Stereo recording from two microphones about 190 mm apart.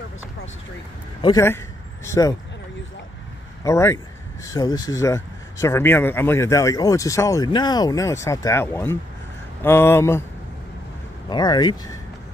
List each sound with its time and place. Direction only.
2.0 s speech: 15° left (ahead or behind)
3.6 s speech: 15° left (ahead or behind)
11.2 s speech: 20° left (ahead or behind)